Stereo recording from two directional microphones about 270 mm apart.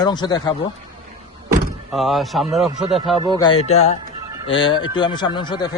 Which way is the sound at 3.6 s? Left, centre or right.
Left.